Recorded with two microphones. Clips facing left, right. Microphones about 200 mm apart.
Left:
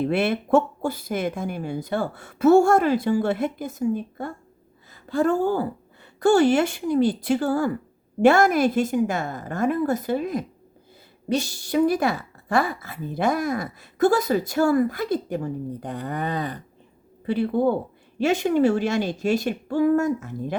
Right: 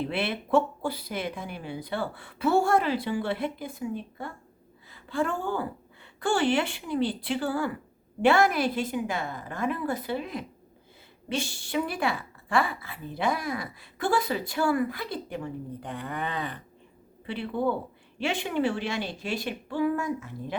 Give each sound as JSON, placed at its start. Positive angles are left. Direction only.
{"t": 0.1, "sound": "a woman's voice", "side_deg": 45}